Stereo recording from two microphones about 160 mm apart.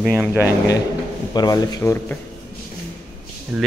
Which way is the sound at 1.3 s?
25° left (ahead or behind).